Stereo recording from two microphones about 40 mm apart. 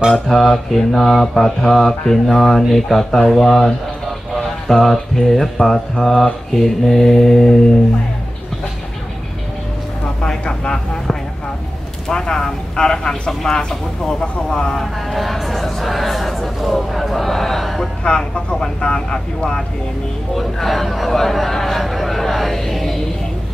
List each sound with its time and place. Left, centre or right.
0.1 s mantra: centre
4.8 s mantra: centre
10.2 s vehicle: centre
12.1 s speech: centre
13.3 s mantra: centre
13.6 s speech: centre
14.8 s speech: centre
18.0 s speech: left
18.6 s mantra: centre
20.3 s a sound: centre
22.7 s music: centre